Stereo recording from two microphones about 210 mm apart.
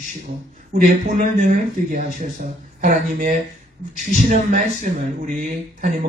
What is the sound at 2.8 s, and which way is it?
Speech, 40° right (ahead or behind).